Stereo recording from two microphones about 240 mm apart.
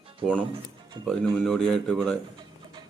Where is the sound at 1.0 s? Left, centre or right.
Centre.